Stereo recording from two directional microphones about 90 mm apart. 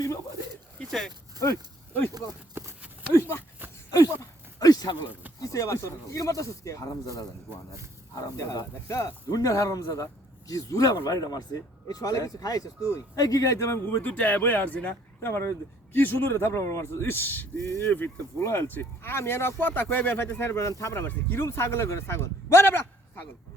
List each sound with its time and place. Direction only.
0.8 s speech: 5° left (ahead or behind)
1.4 s speech: 35° left (ahead or behind)
2.6 s a sound: 25° right (ahead or behind)
4.2 s a sound: 45° left (ahead or behind)
5.4 s speech: 35° left (ahead or behind)
13.8 s speech: 20° left (ahead or behind)